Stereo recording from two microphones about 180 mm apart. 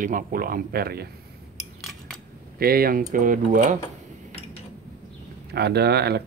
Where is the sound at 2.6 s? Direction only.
55° right (ahead or behind).